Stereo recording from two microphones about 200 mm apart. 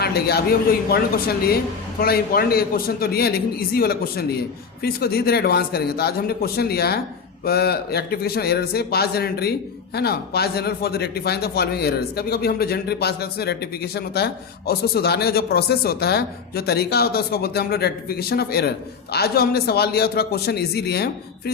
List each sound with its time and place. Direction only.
0.0 s a man's voice: 50° left (ahead or behind)